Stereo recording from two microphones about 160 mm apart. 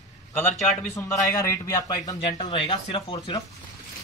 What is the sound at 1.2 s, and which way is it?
A man's voice, 20° left (ahead or behind).